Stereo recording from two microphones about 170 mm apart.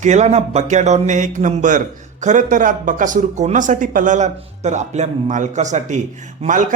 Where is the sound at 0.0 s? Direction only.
45° right (ahead or behind).